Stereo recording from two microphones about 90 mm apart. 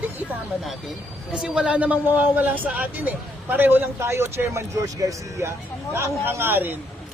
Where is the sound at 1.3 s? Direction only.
10° right (ahead or behind); by 4.6 s 30° right (ahead or behind).